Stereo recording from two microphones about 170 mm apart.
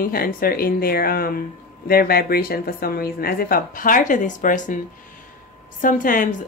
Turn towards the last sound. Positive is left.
turn(degrees=50)  # may be behind; listen again after turning